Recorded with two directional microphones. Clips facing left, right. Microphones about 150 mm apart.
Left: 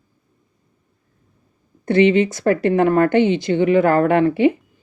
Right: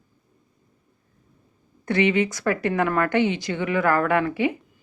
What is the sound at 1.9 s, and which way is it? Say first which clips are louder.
A woman's voice: left 7 dB; 25° left (ahead or behind).